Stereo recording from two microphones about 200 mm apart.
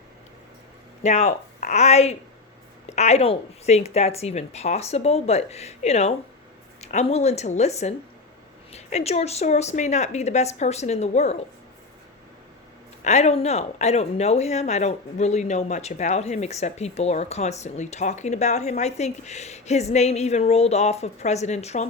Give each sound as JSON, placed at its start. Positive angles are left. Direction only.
{"t": 1.0, "sound": "speech", "side_deg": 35}
{"t": 13.1, "sound": "speech", "side_deg": 35}